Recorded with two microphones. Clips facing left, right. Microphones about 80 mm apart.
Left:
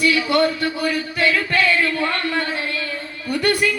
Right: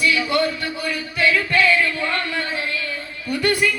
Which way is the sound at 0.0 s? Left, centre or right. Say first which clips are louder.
Left 2 dB; left.